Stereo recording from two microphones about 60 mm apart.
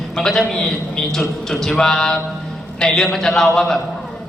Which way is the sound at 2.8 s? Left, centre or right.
Centre.